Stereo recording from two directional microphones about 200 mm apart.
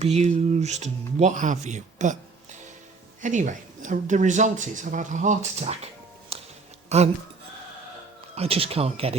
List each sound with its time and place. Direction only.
0.0 s speech: 35° right (ahead or behind)
6.3 s music: 30° right (ahead or behind)
6.9 s speech: 35° right (ahead or behind)
8.4 s speech: 30° right (ahead or behind)